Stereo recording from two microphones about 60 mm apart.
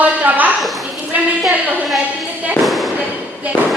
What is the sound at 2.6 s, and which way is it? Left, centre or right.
Fireworks, centre.